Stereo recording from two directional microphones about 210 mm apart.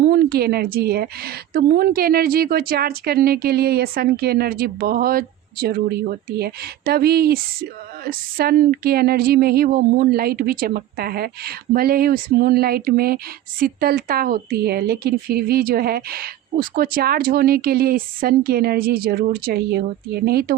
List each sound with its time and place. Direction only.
0.0 s a woman's voice: 45° right (ahead or behind)